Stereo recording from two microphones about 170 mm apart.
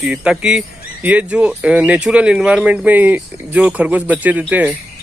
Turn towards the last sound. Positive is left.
turn(degrees=-10)  # may be behind; listen again after turning